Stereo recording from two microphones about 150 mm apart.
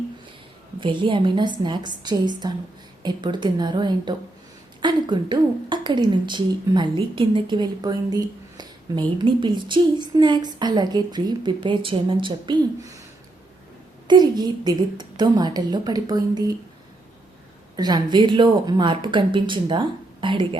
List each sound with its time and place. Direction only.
0.8 s a woman's voice: 35° right (ahead or behind)
14.1 s a woman's voice: 30° right (ahead or behind)
17.7 s a woman's voice: 25° right (ahead or behind)